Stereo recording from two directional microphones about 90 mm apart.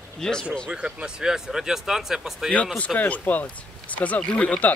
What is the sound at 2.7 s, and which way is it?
Speech, 15° left (ahead or behind).